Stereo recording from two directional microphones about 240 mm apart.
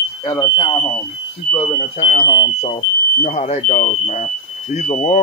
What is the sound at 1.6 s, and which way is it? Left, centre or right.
Speech, left.